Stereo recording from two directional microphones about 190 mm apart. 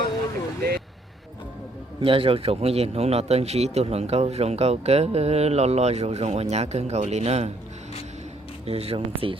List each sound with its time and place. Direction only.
2.0 s a man's voice: 30° right (ahead or behind)
8.6 s a man's voice: 30° right (ahead or behind)